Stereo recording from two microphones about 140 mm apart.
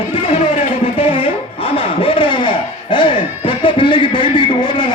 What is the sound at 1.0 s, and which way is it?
Music, 40° left (ahead or behind).